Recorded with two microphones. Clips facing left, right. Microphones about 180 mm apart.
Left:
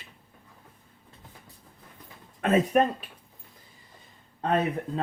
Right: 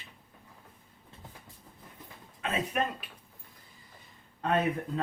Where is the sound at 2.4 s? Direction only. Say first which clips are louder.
Left 10 dB; 45° left (ahead or behind).